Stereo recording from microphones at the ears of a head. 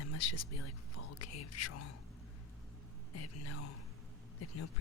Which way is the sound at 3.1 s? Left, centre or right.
Left.